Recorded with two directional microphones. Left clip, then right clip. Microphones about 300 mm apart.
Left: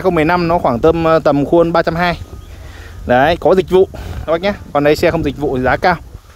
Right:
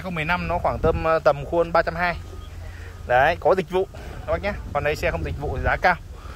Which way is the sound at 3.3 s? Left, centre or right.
Left.